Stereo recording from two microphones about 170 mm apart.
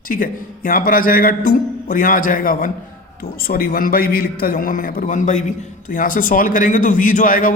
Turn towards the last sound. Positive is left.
turn(degrees=55)  # may be behind; listen again after turning